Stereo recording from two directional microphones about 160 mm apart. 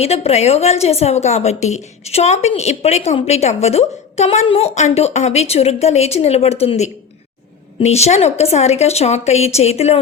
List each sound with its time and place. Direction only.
0.0 s a woman's voice: 40° left (ahead or behind)